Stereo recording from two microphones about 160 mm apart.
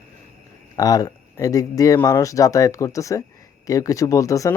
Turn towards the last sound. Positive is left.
turn(degrees=20)  # may be behind; listen again after turning